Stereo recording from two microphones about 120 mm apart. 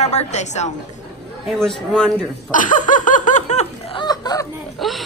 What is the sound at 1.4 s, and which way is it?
Speech, centre (ahead or behind).